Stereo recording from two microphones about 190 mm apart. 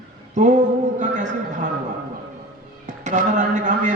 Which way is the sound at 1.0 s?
40° right (ahead or behind).